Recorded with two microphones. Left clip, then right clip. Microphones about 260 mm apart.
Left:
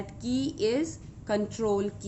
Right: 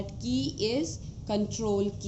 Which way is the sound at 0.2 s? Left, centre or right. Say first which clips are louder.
Left 2 dB; left.